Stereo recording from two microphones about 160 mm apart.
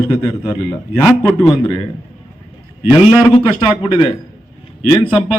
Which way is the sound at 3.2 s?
30° left (ahead or behind).